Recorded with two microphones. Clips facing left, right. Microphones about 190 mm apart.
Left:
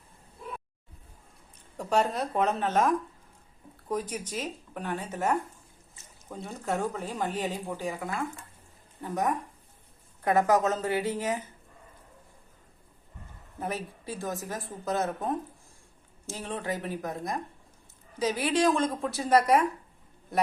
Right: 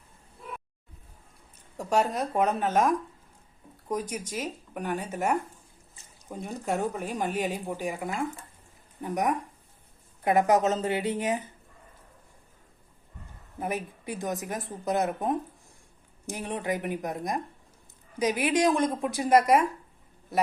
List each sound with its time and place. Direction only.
1.8 s a woman's voice: 10° right (ahead or behind)
13.6 s speech: 15° right (ahead or behind)